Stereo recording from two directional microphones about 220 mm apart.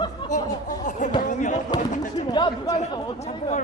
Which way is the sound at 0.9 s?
35° left (ahead or behind).